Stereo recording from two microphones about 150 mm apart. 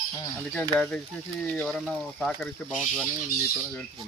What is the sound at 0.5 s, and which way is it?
Speech, 10° left (ahead or behind).